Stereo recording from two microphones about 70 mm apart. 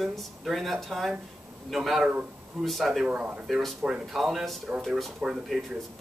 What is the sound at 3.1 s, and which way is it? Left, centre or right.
Speech, centre.